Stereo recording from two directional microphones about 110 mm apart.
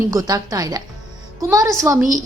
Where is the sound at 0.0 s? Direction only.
30° right (ahead or behind).